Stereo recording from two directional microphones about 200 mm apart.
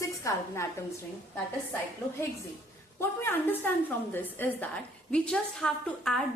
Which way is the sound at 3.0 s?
10° left (ahead or behind).